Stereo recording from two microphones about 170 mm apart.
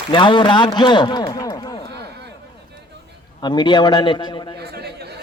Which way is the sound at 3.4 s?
25° left (ahead or behind).